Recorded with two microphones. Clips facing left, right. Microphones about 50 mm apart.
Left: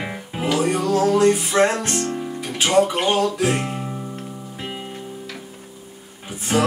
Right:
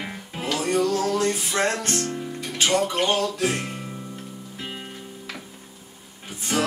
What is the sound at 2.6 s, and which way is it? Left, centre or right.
Music, centre.